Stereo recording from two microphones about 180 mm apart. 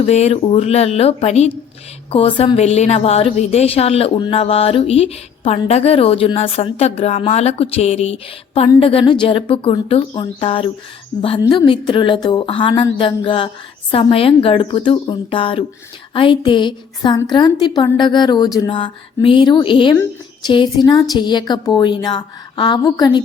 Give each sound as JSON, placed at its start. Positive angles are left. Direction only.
{"t": 0.0, "sound": "a woman's voice", "side_deg": 35}